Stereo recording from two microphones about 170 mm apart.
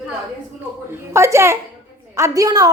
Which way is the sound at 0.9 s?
15° right (ahead or behind).